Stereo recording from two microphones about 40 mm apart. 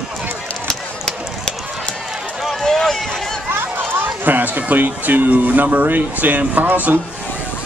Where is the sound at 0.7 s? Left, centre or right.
Centre.